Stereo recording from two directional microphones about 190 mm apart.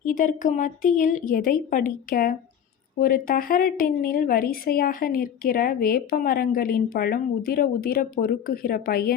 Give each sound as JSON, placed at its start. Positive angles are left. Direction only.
{"t": 0.0, "sound": "a woman's voice", "side_deg": 45}